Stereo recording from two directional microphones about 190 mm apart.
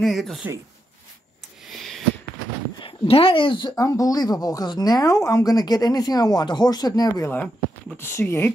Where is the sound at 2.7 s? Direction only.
30° left (ahead or behind); by 8.5 s 10° left (ahead or behind).